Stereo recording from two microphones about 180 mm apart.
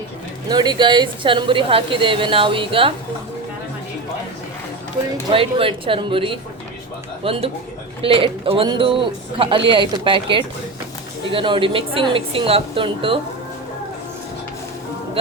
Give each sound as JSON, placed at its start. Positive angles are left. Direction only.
{"t": 0.4, "sound": "a woman's voice", "side_deg": -25}
{"t": 5.3, "sound": "a woman's voice", "side_deg": -30}
{"t": 8.0, "sound": "a woman's voice", "side_deg": -30}